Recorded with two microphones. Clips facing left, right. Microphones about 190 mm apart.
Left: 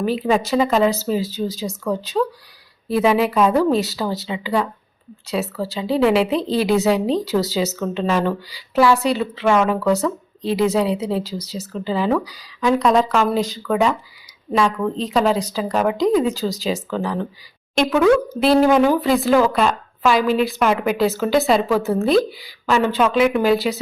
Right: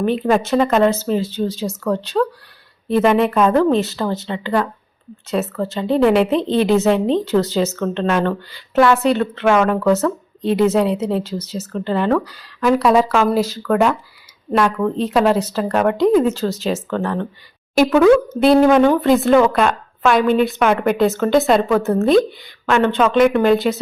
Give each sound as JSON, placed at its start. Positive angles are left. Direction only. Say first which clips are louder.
{"t": 0.0, "sound": "speech", "louder": "right 2 dB", "side_deg": 5}